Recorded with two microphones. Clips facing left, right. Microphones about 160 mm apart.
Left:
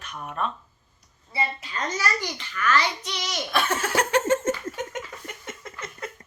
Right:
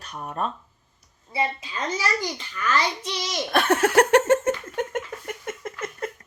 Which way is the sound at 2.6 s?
20° right (ahead or behind).